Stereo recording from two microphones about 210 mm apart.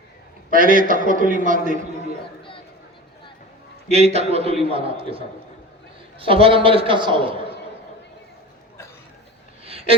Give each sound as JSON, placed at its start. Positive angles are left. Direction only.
{"t": 0.5, "sound": "a man's voice", "side_deg": -40}
{"t": 3.8, "sound": "a man's voice", "side_deg": -30}